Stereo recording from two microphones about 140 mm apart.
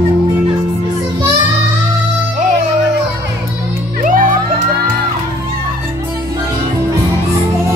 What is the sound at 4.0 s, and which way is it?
Music, 70° right (ahead or behind).